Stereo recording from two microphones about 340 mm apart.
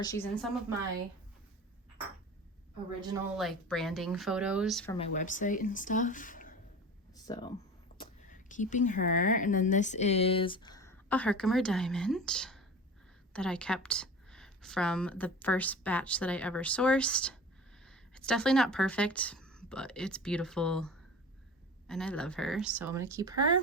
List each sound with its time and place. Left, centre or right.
0.0 s a woman's voice: centre
3.3 s speech: centre
4.9 s speech: left
7.1 s a sound: centre
7.9 s a woman's voice: left; by 23.6 s centre